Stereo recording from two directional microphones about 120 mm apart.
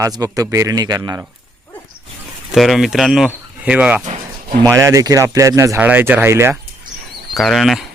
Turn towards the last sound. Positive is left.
turn(degrees=0)  # may be behind; listen again after turning